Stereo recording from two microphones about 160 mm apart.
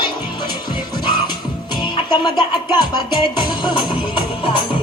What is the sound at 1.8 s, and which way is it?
Music, 30° left (ahead or behind).